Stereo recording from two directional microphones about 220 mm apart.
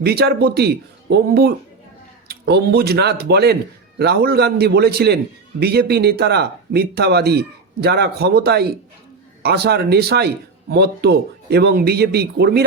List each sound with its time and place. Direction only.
0.0 s a man's voice: 45° right (ahead or behind)